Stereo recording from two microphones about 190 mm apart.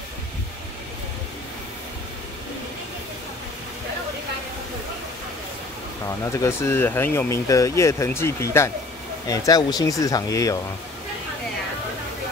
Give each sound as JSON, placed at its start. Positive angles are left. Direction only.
{"t": 6.0, "sound": "speech", "side_deg": 15}